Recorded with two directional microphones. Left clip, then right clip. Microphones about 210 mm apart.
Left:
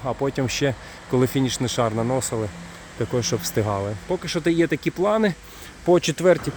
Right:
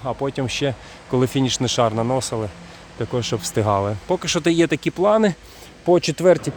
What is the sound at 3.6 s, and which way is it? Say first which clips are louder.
Speech: right 5 dB; 25° right (ahead or behind).